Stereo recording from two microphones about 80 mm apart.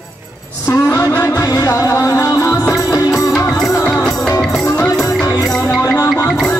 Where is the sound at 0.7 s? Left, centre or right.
Left.